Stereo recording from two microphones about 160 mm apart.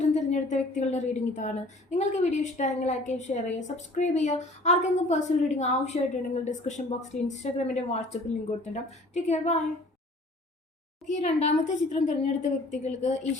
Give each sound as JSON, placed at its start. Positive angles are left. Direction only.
{"t": 0.0, "sound": "a woman's voice", "side_deg": 45}
{"t": 11.0, "sound": "a woman's voice", "side_deg": 45}